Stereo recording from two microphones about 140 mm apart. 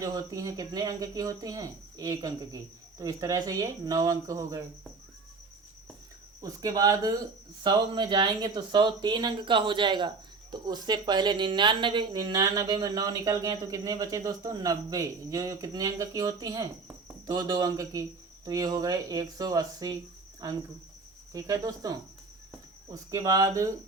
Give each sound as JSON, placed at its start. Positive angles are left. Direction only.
{"t": 0.0, "sound": "speech", "side_deg": -25}
{"t": 6.4, "sound": "speech", "side_deg": -25}
{"t": 12.3, "sound": "speech", "side_deg": -25}
{"t": 21.3, "sound": "speech", "side_deg": -25}